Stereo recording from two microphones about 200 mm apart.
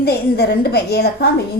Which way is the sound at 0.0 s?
50° left (ahead or behind).